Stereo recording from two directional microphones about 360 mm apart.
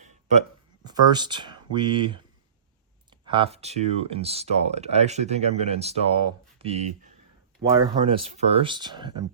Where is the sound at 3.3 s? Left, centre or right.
Centre.